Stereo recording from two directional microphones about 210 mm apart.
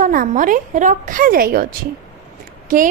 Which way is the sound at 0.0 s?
40° right (ahead or behind).